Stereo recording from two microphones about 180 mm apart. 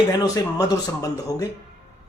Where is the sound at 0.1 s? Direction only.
20° left (ahead or behind).